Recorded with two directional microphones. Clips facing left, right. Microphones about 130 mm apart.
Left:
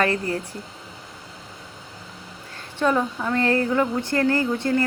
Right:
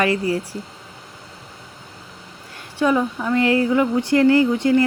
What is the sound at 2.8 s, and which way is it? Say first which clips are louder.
A woman's voice: right 3 dB; 5° right (ahead or behind).